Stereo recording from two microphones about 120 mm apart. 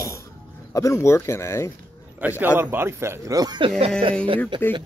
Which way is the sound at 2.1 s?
15° right (ahead or behind).